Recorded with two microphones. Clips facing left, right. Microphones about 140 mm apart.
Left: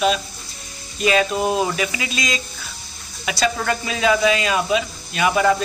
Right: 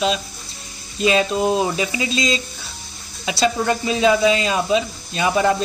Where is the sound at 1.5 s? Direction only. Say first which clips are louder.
Right 1 dB; 25° right (ahead or behind).